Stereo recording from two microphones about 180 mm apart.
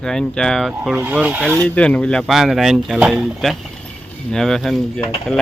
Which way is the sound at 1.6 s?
5° left (ahead or behind).